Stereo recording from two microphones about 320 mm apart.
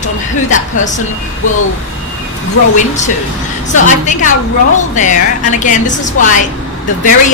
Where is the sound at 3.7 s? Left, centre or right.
Left.